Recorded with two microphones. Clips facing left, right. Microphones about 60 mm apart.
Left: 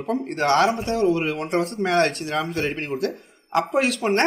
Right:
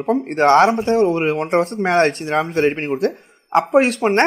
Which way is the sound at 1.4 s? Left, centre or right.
Right.